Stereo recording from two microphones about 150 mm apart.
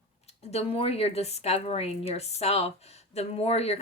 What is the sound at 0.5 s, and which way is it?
Speech, 40° left (ahead or behind).